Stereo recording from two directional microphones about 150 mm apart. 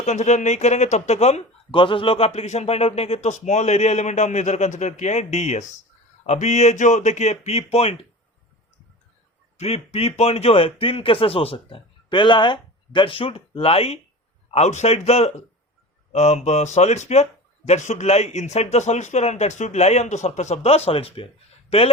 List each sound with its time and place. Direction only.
0.0 s a man's voice: 50° left (ahead or behind)
1.8 s a man's voice: 35° left (ahead or behind)
9.6 s a man's voice: 45° left (ahead or behind)